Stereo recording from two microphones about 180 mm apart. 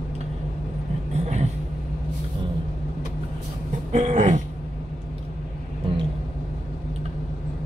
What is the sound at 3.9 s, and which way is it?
Throat clearing, 40° right (ahead or behind).